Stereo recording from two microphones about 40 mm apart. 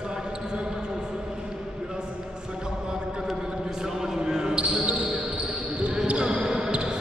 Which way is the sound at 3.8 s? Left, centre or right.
Centre.